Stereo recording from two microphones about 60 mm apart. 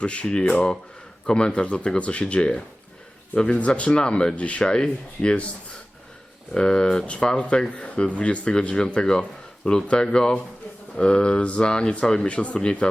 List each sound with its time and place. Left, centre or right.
0.0 s speech: centre
6.5 s speech: centre